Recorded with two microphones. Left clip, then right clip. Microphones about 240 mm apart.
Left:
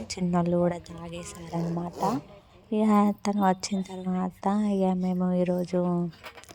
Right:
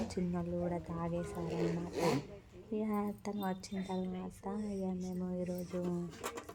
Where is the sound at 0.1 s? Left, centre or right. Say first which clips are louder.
Left 12 dB; left.